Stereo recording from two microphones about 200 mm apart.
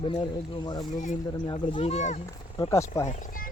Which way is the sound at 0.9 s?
40° left (ahead or behind).